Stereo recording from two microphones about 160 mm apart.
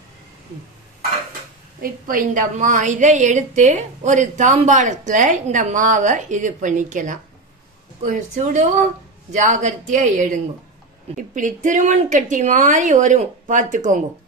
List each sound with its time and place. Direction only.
1.8 s a woman's voice: 60° right (ahead or behind)